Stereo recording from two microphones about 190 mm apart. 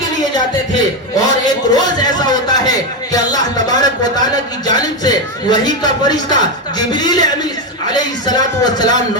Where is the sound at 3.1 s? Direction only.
20° left (ahead or behind).